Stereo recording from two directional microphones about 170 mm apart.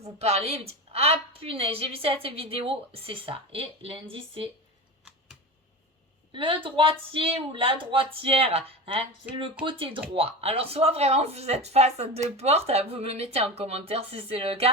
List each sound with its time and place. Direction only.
0.0 s speech: 40° right (ahead or behind)
6.3 s speech: 30° right (ahead or behind)